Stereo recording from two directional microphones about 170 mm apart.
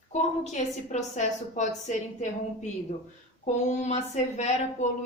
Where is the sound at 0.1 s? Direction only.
40° left (ahead or behind).